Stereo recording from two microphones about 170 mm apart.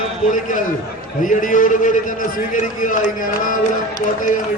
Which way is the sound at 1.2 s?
50° left (ahead or behind).